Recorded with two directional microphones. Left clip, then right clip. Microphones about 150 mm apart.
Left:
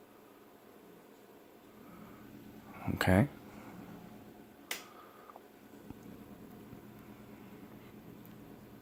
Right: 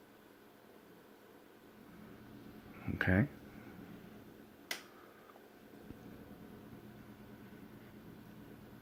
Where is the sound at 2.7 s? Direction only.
30° left (ahead or behind).